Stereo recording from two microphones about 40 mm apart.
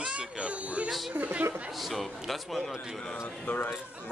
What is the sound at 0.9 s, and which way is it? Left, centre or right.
Speech, centre.